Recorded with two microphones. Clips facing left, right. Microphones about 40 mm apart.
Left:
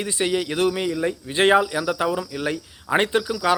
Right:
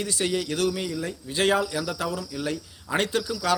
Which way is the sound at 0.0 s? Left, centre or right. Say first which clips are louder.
Left 4 dB; left.